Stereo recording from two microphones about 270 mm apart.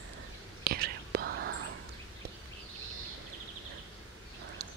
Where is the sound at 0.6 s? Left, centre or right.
Right.